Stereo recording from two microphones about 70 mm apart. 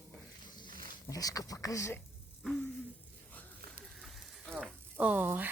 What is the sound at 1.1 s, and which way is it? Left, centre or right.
Speech, left.